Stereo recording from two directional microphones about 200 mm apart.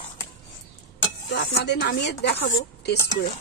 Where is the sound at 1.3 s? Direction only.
60° left (ahead or behind).